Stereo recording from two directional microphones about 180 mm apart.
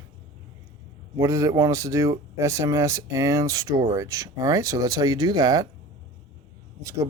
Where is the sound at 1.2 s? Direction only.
15° right (ahead or behind).